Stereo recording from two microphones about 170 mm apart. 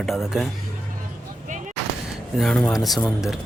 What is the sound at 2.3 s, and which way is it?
Speech, 5° left (ahead or behind).